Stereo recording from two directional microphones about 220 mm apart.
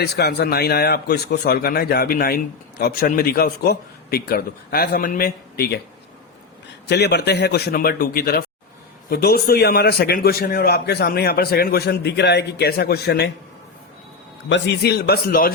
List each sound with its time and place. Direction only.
0.0 s a man's voice: 45° left (ahead or behind)
6.8 s a man's voice: 50° left (ahead or behind)
14.5 s a man's voice: 50° left (ahead or behind)